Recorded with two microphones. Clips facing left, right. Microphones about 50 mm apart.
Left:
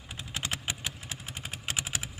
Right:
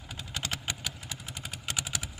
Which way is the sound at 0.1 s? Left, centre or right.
Centre.